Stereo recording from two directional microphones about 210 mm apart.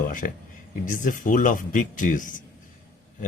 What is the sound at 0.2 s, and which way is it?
Speech, 40° left (ahead or behind).